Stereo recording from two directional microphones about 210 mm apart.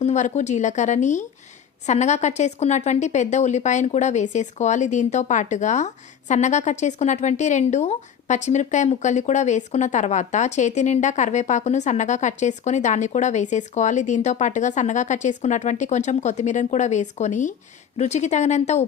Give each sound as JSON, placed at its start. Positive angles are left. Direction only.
{"t": 0.0, "sound": "a woman's voice", "side_deg": 35}